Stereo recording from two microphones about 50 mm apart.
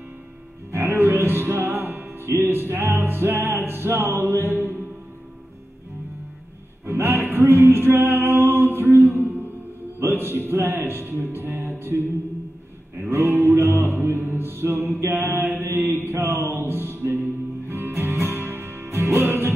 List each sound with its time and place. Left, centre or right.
0.7 s music: right
1.9 s music: right
6.9 s music: right
9.9 s a man's voice: right
13.0 s music: right